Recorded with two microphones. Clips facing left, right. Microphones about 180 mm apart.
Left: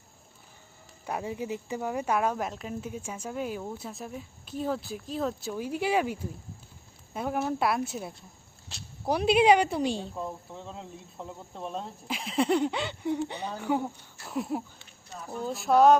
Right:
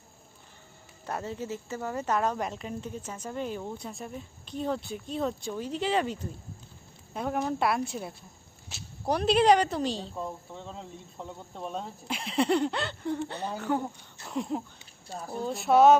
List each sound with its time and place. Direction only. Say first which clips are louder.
1.0 s speech: left 1 dB; 10° left (ahead or behind)